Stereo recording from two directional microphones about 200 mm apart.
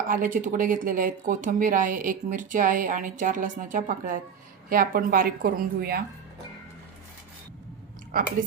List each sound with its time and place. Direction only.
0.1 s a woman's voice: 40° right (ahead or behind)